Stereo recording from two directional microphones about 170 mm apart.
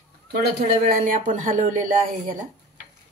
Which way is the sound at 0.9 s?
50° right (ahead or behind).